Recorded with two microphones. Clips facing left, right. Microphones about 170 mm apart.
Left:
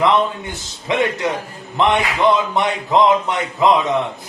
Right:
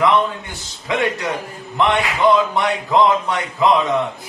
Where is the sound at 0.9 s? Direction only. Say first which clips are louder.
Left 2 dB; 20° left (ahead or behind).